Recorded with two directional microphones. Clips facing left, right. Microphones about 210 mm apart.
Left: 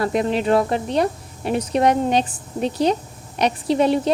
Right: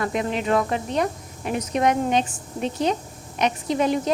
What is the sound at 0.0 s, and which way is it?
A woman's voice, 35° left (ahead or behind).